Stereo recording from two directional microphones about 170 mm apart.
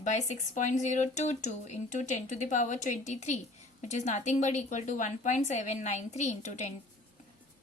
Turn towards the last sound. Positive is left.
turn(degrees=45)  # may be behind; listen again after turning